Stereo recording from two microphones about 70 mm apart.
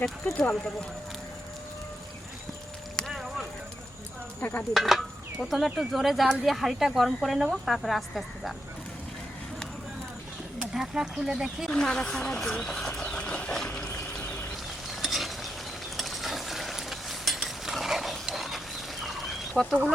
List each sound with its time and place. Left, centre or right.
0.3 s speech: centre
3.1 s a sound: centre
4.4 s stir: left
4.7 s speech: centre
10.6 s a sound: centre
11.3 s speech: centre
11.7 s speech: centre
15.0 s mechanisms: centre
19.0 s fowl: centre